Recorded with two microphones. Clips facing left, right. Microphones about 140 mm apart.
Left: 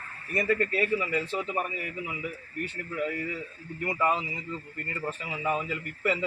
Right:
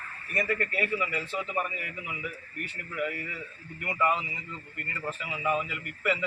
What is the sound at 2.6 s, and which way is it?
A man's voice, 30° left (ahead or behind).